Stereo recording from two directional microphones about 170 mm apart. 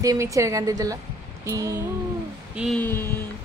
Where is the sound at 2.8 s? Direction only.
10° left (ahead or behind).